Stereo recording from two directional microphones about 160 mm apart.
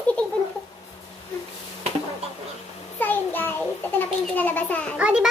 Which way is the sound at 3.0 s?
10° left (ahead or behind).